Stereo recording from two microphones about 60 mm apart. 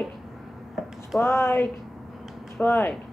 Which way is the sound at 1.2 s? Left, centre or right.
Left.